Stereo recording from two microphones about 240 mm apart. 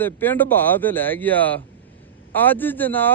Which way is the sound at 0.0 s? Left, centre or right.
Centre.